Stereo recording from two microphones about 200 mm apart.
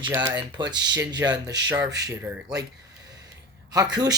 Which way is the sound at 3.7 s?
20° right (ahead or behind).